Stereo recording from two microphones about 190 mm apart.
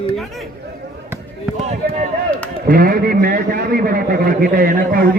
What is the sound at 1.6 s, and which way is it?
Speech, 35° right (ahead or behind).